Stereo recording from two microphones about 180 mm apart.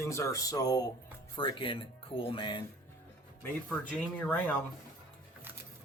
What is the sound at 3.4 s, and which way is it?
Speech, 10° left (ahead or behind).